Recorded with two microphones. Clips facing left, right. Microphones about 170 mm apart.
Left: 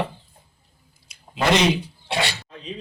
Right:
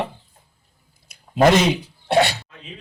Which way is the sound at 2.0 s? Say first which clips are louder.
Right 9 dB; 55° right (ahead or behind).